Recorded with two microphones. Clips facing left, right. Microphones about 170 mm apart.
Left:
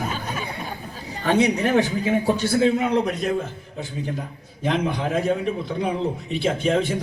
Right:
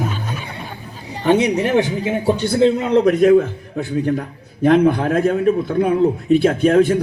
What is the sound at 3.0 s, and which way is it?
A man's voice, 60° right (ahead or behind).